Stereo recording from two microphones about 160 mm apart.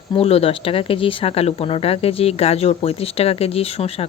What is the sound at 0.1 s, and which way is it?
Speech, 40° left (ahead or behind).